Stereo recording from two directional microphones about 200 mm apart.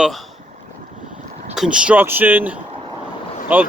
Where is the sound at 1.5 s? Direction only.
5° right (ahead or behind).